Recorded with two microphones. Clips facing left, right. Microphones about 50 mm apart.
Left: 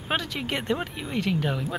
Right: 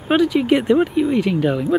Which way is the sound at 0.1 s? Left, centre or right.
Centre.